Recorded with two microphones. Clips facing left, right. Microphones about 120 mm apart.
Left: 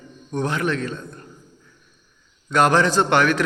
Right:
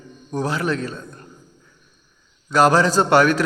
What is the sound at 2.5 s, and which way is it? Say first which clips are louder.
Speech: right 2 dB; 30° right (ahead or behind).